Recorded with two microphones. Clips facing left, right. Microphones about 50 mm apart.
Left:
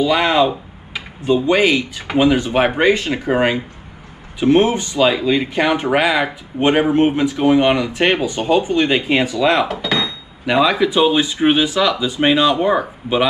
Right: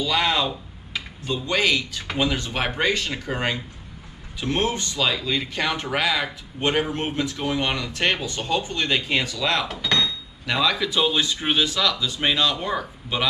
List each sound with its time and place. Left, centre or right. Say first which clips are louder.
0.0 s speech: left 8 dB; centre
9.7 s speech: left 5 dB; centre
9.9 s speech: left 2 dB; centre